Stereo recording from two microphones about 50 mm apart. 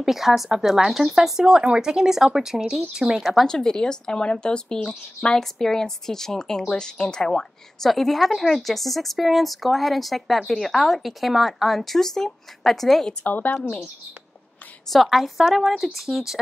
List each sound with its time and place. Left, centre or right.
0.0 s speech: centre
3.4 s a woman's voice: centre
13.2 s a woman's voice: left
14.9 s speech: centre